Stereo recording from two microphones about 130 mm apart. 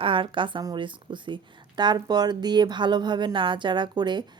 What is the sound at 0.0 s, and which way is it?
A woman's voice, 40° right (ahead or behind).